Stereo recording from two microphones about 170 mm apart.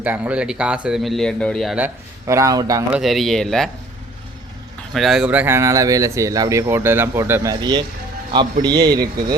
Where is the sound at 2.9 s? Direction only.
Centre (ahead or behind).